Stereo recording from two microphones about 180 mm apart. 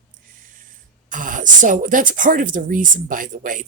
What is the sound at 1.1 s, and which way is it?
Speech, 45° right (ahead or behind).